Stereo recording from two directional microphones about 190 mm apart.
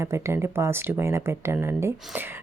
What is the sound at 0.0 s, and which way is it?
Speech, 15° right (ahead or behind).